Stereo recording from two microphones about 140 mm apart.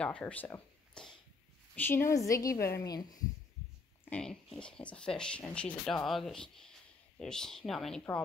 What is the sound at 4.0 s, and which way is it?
Speech, 10° left (ahead or behind).